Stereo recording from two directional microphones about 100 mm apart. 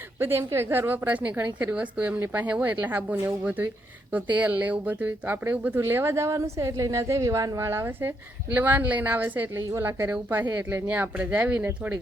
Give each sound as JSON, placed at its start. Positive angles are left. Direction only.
{"t": 0.2, "sound": "a woman's voice", "side_deg": -25}
{"t": 9.6, "sound": "a woman's voice", "side_deg": -30}